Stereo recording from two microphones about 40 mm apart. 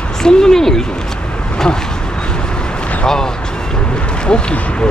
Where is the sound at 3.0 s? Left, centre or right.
Centre.